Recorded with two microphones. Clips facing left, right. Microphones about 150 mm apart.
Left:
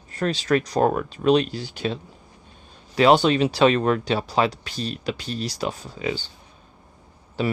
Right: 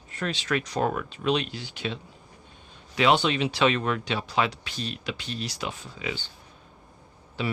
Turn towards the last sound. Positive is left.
turn(degrees=40)  # may be behind; listen again after turning